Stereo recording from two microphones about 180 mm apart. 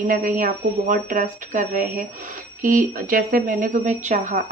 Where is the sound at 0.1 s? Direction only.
45° right (ahead or behind).